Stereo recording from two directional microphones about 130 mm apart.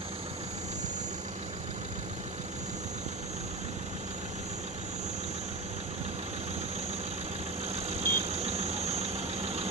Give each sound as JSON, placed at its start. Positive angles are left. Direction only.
{"t": 7.9, "sound": "vehicle", "side_deg": -55}